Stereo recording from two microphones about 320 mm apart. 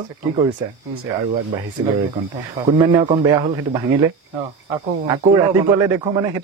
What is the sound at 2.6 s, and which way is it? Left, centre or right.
A man's voice, centre.